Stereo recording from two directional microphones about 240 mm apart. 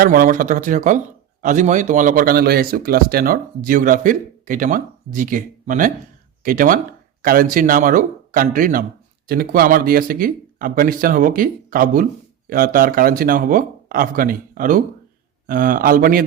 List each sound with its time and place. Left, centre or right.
0.0 s speech: right